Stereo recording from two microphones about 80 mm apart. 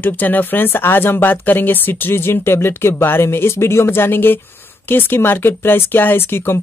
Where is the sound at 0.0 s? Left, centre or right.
Left.